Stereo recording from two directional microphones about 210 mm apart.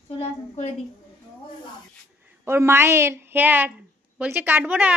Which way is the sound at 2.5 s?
10° right (ahead or behind).